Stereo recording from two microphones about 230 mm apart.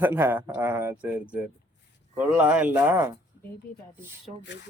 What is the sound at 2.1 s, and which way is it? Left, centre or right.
A man's voice, centre.